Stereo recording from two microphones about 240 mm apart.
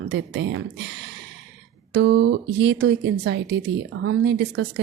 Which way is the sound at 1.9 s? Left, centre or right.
Right.